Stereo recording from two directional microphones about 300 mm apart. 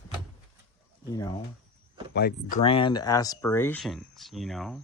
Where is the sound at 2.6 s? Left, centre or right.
Centre.